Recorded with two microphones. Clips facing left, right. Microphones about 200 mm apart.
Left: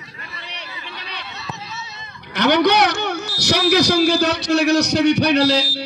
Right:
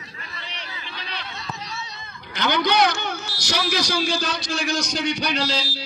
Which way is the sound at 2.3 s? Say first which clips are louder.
Left 7 dB; 65° left (ahead or behind).